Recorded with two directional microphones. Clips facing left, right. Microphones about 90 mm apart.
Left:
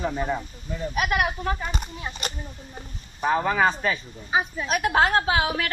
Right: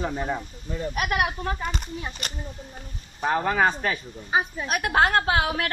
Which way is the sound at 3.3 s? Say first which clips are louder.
Left 1 dB; 45° right (ahead or behind).